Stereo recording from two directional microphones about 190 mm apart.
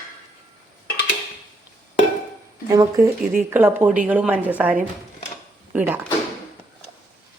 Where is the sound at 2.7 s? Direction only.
15° right (ahead or behind).